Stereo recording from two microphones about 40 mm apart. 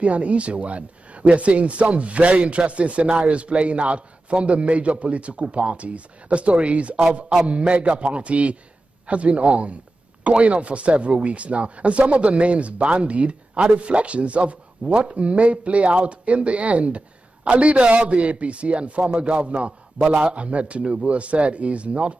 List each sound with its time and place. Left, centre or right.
0.0 s speech: right
20.0 s speech: right